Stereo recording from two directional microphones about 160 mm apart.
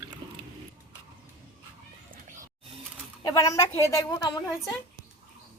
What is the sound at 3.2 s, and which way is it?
A woman's voice, 20° left (ahead or behind).